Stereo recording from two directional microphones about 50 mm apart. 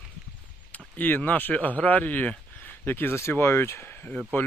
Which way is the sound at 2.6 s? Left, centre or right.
Left.